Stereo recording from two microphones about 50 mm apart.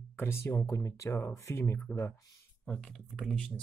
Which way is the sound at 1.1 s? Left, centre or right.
Left.